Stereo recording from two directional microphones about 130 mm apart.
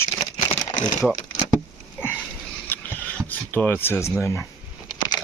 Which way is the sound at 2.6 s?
15° left (ahead or behind).